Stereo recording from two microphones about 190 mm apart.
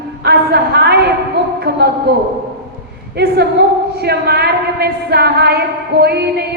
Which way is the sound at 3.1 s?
60° right (ahead or behind).